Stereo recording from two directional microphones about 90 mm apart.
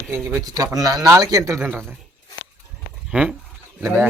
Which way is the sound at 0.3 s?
45° right (ahead or behind).